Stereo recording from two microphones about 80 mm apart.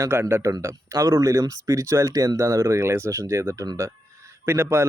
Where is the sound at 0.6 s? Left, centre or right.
Right.